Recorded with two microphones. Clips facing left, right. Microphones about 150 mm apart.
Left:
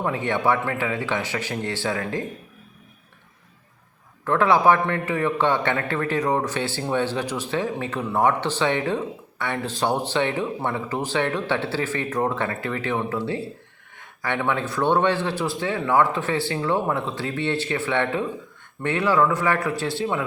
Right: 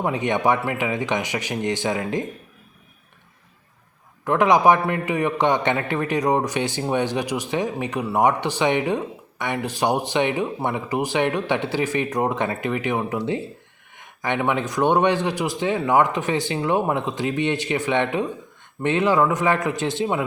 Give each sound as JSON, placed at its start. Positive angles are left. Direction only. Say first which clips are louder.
{"t": 0.0, "sound": "a man's voice", "louder": "right 2 dB", "side_deg": -20}
{"t": 4.2, "sound": "a man's voice", "louder": "right 2 dB", "side_deg": -15}